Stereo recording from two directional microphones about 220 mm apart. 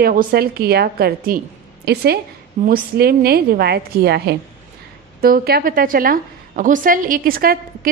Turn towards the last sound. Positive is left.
turn(degrees=-40)  # may be behind; listen again after turning